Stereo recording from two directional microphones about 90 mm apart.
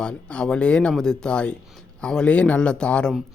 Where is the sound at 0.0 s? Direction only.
10° left (ahead or behind).